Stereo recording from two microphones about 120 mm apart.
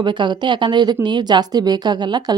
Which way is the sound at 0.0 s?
40° right (ahead or behind).